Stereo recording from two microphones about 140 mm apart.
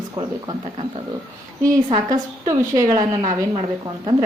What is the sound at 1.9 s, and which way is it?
A woman's voice, 25° right (ahead or behind).